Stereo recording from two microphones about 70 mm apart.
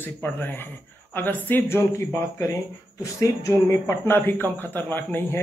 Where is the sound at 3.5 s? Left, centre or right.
Left.